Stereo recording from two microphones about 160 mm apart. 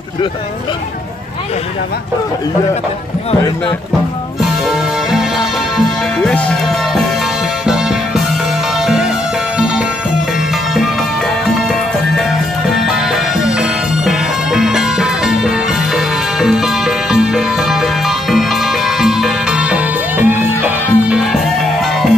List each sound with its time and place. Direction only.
4.6 s music: 5° right (ahead or behind)
8.8 s music: 5° right (ahead or behind)
12.8 s music: centre (ahead or behind)